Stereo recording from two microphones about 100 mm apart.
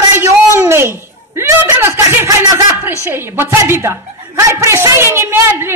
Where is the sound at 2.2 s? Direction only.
35° right (ahead or behind).